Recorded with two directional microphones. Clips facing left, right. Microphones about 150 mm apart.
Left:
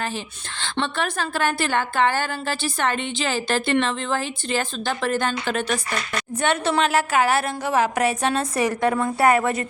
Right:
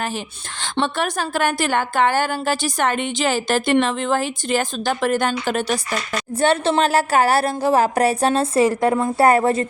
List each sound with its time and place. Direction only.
0.6 s a woman's voice: 40° right (ahead or behind)